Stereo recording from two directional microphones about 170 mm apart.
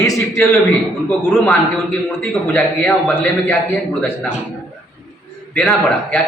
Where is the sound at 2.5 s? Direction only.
10° left (ahead or behind).